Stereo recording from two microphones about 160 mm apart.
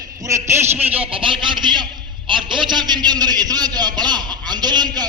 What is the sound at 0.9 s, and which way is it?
A man's voice, 35° right (ahead or behind).